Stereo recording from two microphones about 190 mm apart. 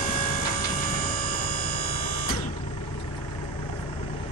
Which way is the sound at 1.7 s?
50° left (ahead or behind).